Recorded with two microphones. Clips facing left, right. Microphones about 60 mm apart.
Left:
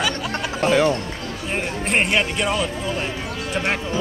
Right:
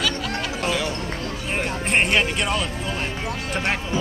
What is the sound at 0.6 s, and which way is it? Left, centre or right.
Speech, left.